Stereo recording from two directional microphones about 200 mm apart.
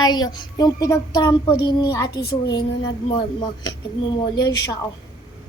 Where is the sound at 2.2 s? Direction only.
55° left (ahead or behind).